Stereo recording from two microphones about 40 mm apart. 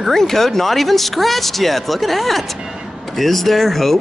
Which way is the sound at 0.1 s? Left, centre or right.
Centre.